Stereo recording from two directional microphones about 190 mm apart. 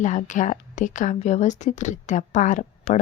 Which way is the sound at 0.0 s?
40° left (ahead or behind).